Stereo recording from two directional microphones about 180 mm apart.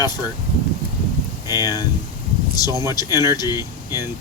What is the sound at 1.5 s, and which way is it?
Speech, 20° left (ahead or behind).